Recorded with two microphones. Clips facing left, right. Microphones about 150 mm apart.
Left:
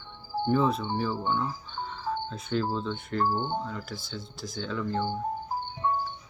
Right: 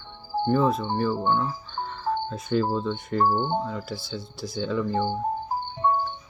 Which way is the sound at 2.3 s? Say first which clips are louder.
Right 5 dB; 5° right (ahead or behind).